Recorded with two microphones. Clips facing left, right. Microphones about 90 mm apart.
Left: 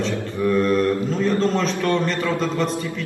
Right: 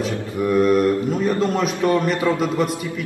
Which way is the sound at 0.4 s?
15° right (ahead or behind).